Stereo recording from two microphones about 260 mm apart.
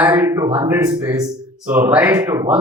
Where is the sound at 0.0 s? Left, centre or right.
Centre.